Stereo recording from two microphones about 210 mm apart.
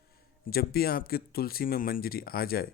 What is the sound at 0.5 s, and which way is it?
Speech, 45° left (ahead or behind).